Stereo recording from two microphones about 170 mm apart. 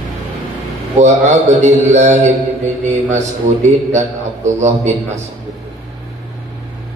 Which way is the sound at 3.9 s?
45° right (ahead or behind).